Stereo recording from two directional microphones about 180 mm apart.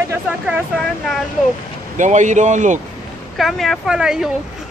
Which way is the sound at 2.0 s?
40° right (ahead or behind).